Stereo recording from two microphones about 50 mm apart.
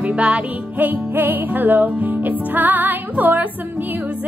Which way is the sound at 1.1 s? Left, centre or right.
Right.